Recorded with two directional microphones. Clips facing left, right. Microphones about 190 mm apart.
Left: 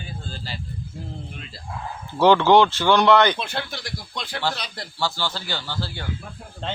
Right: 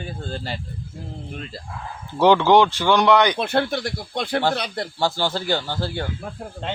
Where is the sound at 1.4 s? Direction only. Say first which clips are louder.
Right 6 dB; 45° right (ahead or behind).